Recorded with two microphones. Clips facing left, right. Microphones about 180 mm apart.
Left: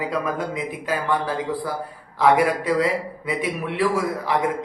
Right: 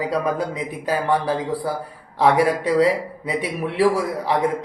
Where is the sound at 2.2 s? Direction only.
35° right (ahead or behind).